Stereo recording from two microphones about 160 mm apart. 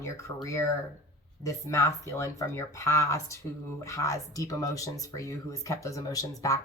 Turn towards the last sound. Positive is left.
turn(degrees=20)  # may be behind; listen again after turning